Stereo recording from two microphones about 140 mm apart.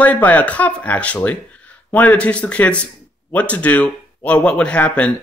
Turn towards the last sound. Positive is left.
turn(degrees=10)  # may be behind; listen again after turning